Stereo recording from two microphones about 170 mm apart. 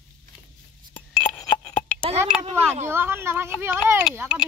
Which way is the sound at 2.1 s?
35° right (ahead or behind).